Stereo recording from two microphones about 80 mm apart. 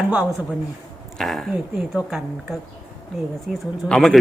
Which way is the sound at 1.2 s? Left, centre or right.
Centre.